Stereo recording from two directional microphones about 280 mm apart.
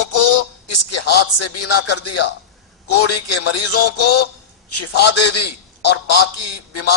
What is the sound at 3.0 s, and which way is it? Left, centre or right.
Speech, left.